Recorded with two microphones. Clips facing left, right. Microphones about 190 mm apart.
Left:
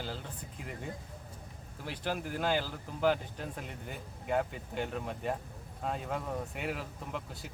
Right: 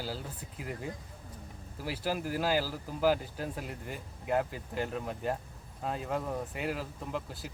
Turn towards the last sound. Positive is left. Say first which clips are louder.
# right 3 dB
turn(degrees=0)  # may be behind; listen again after turning